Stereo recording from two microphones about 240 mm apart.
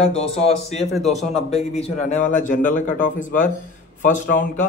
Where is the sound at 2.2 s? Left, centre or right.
Left.